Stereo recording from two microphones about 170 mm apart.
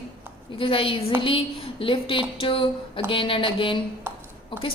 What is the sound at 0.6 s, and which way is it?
A woman's voice, 30° left (ahead or behind).